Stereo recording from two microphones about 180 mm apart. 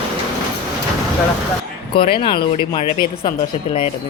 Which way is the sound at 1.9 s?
30° left (ahead or behind).